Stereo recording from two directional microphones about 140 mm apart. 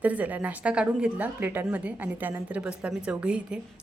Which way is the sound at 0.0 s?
10° right (ahead or behind).